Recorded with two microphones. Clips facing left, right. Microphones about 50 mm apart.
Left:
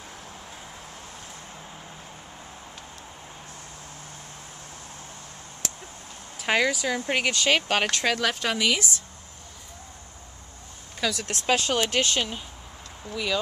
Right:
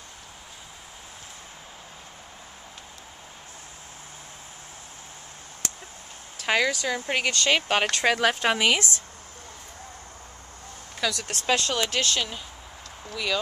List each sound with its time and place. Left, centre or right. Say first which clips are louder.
6.3 s speech: even; centre
7.9 s speech: right 3 dB; centre
11.0 s speech: left 1 dB; centre
13.1 s speech: even; centre